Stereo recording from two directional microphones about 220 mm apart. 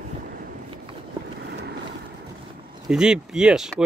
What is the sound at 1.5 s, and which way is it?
Vehicle, 50° right (ahead or behind).